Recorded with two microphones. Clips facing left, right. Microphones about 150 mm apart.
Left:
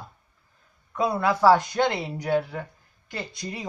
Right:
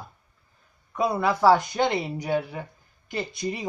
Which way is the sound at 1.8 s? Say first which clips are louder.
Even; 15° right (ahead or behind).